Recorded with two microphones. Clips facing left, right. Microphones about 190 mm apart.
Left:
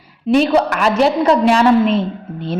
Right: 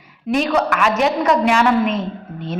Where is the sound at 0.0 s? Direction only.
30° left (ahead or behind).